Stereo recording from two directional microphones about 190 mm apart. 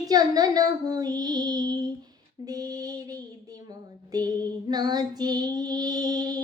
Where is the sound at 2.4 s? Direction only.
20° right (ahead or behind).